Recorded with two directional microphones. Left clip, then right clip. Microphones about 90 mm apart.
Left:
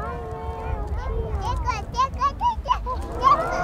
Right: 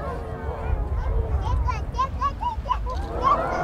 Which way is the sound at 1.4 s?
15° left (ahead or behind).